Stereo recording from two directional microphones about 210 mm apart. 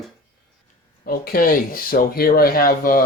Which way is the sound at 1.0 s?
45° left (ahead or behind).